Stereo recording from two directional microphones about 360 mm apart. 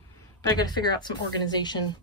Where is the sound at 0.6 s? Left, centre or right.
Centre.